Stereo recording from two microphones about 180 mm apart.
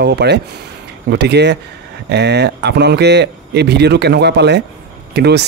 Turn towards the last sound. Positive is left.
turn(degrees=-70)  # may be behind; listen again after turning